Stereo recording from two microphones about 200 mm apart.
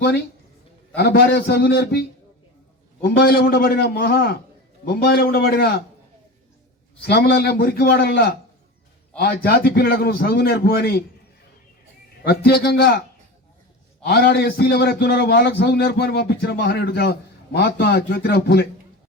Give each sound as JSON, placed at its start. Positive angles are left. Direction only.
{"t": 0.9, "sound": "a man's voice", "side_deg": 55}
{"t": 7.0, "sound": "a man's voice", "side_deg": 55}
{"t": 12.2, "sound": "a man's voice", "side_deg": 50}
{"t": 14.0, "sound": "a man's voice", "side_deg": 55}